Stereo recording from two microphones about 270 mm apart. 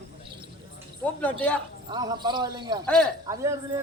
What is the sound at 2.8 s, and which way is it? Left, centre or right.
Speech, centre.